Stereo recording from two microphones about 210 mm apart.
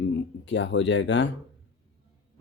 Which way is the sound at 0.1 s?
60° left (ahead or behind).